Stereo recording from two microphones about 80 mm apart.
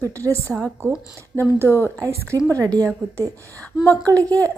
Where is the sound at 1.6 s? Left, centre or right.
Right.